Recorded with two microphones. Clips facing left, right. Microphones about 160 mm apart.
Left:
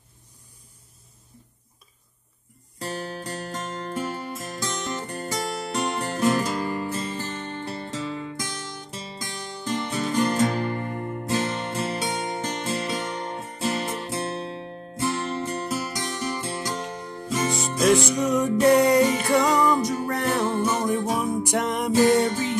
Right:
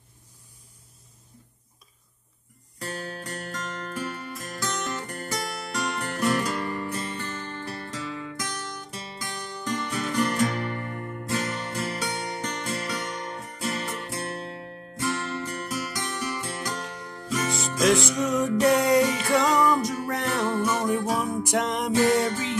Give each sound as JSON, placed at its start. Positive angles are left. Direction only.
{"t": 2.8, "sound": "music", "side_deg": 30}
{"t": 9.7, "sound": "music", "side_deg": 25}
{"t": 17.6, "sound": "music", "side_deg": 0}
{"t": 19.6, "sound": "music", "side_deg": 25}
{"t": 21.4, "sound": "music", "side_deg": 0}